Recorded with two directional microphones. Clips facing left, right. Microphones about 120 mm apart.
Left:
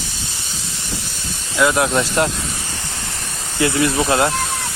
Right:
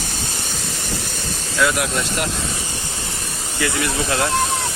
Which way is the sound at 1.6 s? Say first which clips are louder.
Left 4 dB; 25° left (ahead or behind).